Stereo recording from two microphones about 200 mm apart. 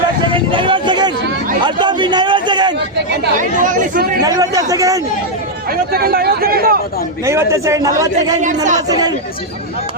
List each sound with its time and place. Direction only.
0.3 s a sound: 25° right (ahead or behind)
3.3 s speech: 40° right (ahead or behind)
4.2 s speech: 20° right (ahead or behind)
5.9 s speech: 50° right (ahead or behind)
7.3 s speech: 15° right (ahead or behind)
8.1 s speech: 40° right (ahead or behind)
8.9 s speech: 20° right (ahead or behind)